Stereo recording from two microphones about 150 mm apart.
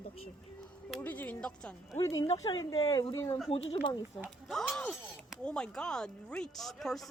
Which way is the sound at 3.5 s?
40° left (ahead or behind).